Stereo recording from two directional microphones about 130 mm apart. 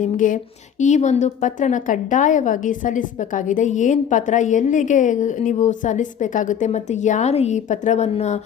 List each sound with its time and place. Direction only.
0.0 s speech: 80° left
0.8 s a woman's voice: 65° left (ahead or behind)